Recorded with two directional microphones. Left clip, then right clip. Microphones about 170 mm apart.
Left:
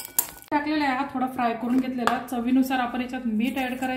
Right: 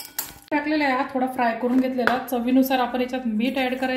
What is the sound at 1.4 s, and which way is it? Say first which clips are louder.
A woman's voice: right 4 dB; 10° right (ahead or behind).